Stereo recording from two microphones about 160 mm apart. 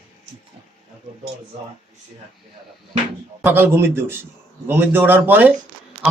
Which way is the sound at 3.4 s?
15° right (ahead or behind).